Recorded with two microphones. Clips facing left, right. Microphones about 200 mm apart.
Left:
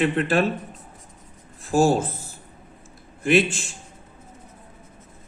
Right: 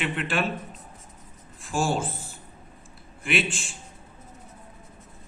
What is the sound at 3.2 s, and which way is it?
Speech, 40° left (ahead or behind).